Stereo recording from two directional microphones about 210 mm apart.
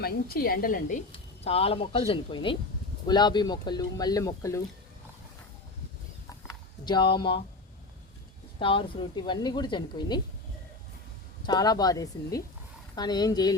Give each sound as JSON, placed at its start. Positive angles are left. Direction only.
{"t": 0.0, "sound": "a woman's voice", "side_deg": 45}
{"t": 1.5, "sound": "a woman's voice", "side_deg": 30}
{"t": 6.8, "sound": "a woman's voice", "side_deg": 20}
{"t": 8.5, "sound": "a woman's voice", "side_deg": 25}
{"t": 11.4, "sound": "a woman's voice", "side_deg": 20}